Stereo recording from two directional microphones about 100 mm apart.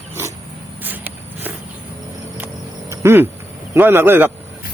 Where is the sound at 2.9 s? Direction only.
25° right (ahead or behind).